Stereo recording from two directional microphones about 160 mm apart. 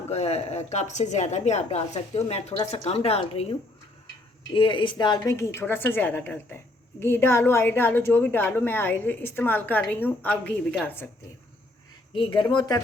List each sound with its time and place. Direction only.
0.1 s speech: 40° left (ahead or behind)
4.5 s a woman's voice: 30° left (ahead or behind); by 11.1 s 10° left (ahead or behind)
12.1 s speech: 30° left (ahead or behind)